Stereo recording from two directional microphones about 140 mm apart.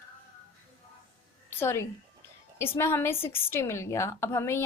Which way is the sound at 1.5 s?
15° left (ahead or behind).